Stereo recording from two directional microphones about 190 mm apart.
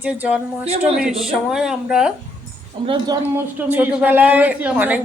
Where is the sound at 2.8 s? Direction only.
25° right (ahead or behind).